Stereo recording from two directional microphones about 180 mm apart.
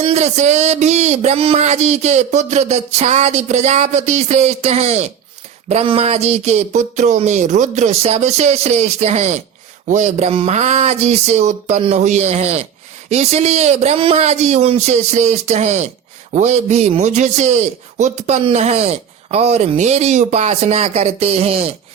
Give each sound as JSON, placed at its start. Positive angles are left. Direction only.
{"t": 0.0, "sound": "a man's voice", "side_deg": -40}